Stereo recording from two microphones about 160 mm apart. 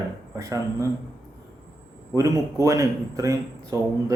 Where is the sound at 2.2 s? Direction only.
20° right (ahead or behind).